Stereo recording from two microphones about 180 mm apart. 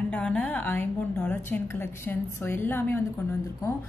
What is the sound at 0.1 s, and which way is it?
A woman's voice, 5° left (ahead or behind).